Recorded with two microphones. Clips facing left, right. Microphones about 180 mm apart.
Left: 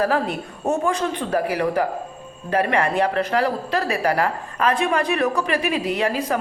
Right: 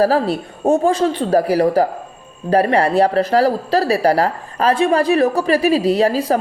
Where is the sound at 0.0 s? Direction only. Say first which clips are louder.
Right 6 dB; 35° right (ahead or behind).